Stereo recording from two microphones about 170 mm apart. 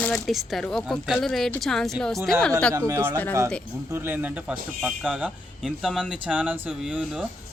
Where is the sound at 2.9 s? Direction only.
15° right (ahead or behind).